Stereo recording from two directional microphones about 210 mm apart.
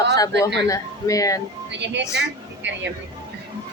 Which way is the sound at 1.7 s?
55° right (ahead or behind).